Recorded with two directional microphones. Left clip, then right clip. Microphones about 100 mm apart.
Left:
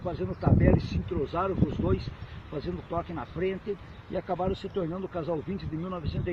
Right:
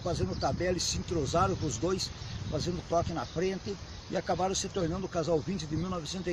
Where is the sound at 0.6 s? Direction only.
55° right (ahead or behind).